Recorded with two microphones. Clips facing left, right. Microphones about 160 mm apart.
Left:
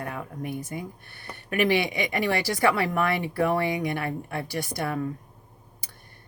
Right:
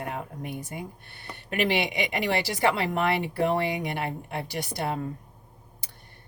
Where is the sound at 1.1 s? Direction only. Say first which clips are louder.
Left 3 dB; 25° right (ahead or behind).